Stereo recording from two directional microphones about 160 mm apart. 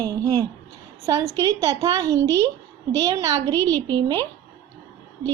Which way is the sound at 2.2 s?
15° left (ahead or behind).